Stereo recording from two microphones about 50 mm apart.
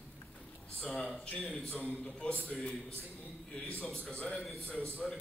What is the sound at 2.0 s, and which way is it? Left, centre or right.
Speech, left.